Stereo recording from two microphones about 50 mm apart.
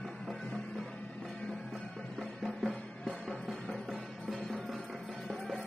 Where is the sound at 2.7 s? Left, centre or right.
Centre.